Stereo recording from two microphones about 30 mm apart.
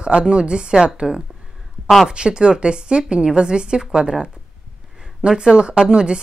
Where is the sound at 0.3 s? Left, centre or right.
Right.